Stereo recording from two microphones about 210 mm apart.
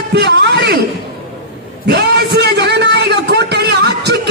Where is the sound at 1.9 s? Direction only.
55° right (ahead or behind).